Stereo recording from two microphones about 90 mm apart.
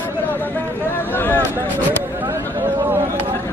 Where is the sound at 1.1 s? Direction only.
20° left (ahead or behind).